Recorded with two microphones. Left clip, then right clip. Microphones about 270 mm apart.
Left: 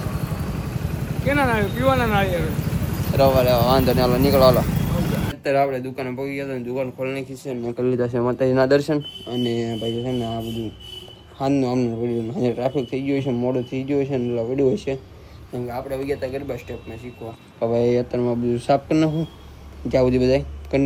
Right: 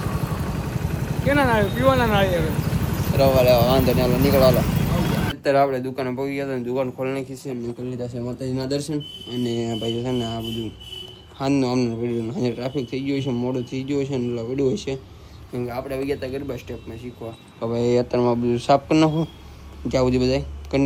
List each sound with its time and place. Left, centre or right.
0.0 s speech: centre
7.4 s a man's voice: left
8.4 s a man's voice: centre
17.6 s a man's voice: centre